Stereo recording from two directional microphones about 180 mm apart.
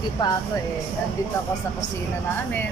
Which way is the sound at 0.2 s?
25° left (ahead or behind).